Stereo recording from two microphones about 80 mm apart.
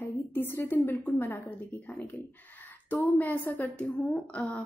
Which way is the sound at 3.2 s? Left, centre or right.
Left.